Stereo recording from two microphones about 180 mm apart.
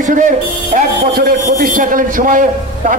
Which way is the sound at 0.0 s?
45° right (ahead or behind).